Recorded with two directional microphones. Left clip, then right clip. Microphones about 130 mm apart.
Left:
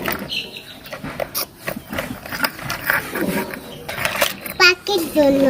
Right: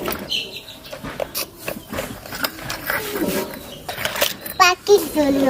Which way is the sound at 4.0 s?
Centre (ahead or behind).